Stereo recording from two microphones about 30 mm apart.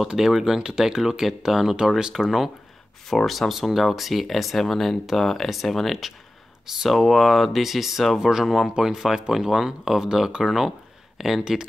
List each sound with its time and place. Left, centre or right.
0.1 s speech: centre
2.2 s speech: centre